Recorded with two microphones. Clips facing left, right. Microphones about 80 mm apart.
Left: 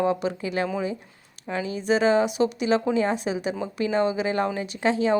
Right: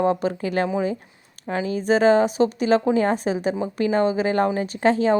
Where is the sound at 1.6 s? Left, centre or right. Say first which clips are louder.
Right 4 dB; right.